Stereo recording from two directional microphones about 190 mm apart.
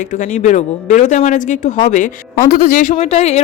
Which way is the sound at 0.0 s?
40° left (ahead or behind).